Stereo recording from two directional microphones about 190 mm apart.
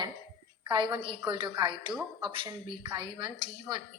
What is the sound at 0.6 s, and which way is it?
A woman's voice, 25° right (ahead or behind).